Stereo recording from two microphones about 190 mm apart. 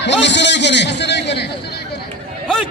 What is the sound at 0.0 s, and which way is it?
A man's voice, 70° left (ahead or behind).